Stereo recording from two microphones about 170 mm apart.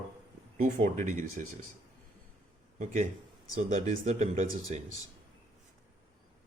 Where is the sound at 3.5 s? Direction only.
45° right (ahead or behind).